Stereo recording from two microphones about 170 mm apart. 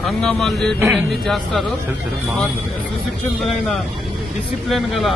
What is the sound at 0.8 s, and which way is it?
Speech, 15° right (ahead or behind).